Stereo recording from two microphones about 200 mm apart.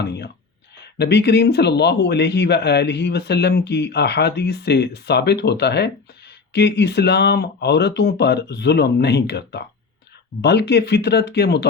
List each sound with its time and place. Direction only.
0.0 s a man's voice: 55° left (ahead or behind)